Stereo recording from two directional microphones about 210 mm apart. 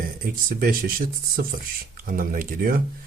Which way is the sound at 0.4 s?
45° right (ahead or behind).